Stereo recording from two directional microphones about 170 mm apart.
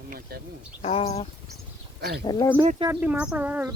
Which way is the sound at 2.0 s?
70° right (ahead or behind).